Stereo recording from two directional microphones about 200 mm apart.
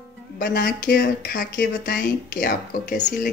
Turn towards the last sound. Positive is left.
turn(degrees=45)  # may be behind; listen again after turning